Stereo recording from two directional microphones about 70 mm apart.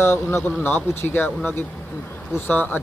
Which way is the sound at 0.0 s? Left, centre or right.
Left.